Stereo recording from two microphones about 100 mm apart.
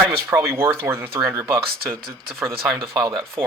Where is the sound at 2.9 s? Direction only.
40° right (ahead or behind).